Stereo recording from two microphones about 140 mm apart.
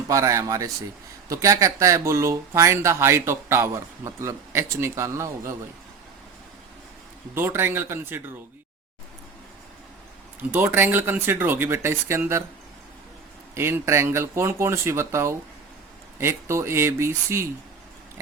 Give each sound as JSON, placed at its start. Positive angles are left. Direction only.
{"t": 0.1, "sound": "speech", "side_deg": -25}
{"t": 7.3, "sound": "speech", "side_deg": -15}
{"t": 10.5, "sound": "speech", "side_deg": -15}
{"t": 13.5, "sound": "speech", "side_deg": -15}